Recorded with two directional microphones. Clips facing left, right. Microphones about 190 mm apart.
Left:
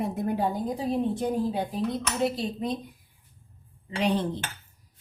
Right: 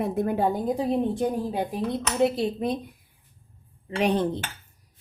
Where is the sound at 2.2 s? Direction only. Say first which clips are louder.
Right 5 dB; 55° right (ahead or behind).